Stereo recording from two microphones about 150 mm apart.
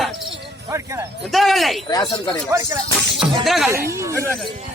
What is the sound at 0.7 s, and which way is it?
Speech, 20° right (ahead or behind).